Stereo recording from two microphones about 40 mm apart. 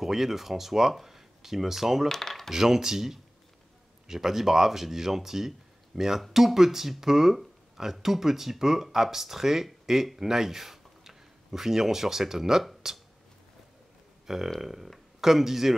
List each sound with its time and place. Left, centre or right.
0.0 s speech: centre
2.0 s speech: centre
2.5 s speech: centre
14.2 s burping: centre
14.6 s speech: centre